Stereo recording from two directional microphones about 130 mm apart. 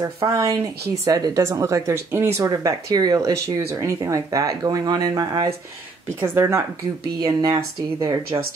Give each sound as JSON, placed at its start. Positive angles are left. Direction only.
{"t": 0.0, "sound": "speech", "side_deg": -25}